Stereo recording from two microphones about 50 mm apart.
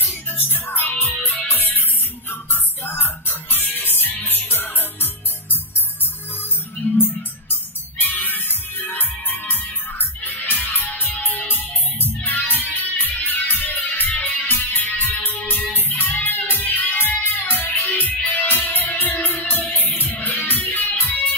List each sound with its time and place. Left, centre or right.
0.4 s music: left
8.0 s music: left